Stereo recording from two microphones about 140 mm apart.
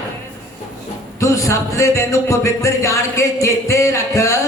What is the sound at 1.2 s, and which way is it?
A woman's voice, 25° left (ahead or behind).